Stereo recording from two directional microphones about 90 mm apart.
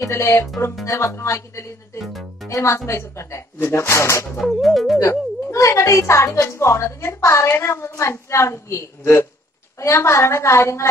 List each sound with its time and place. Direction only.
0.0 s a woman's voice: 30° left (ahead or behind)
4.4 s music: centre (ahead or behind)
5.5 s a woman's voice: 35° left (ahead or behind)